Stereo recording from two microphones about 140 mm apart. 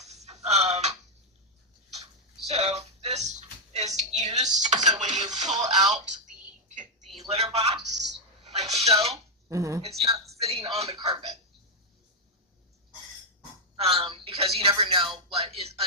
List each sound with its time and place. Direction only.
0.0 s music: 50° right (ahead or behind)
2.5 s a sound: 50° right (ahead or behind)
4.4 s music: 60° right (ahead or behind)
7.3 s a sound: 50° right (ahead or behind)
9.5 s speech: 25° right (ahead or behind)
10.0 s a man's voice: 45° right (ahead or behind)
13.7 s speech: 45° right (ahead or behind)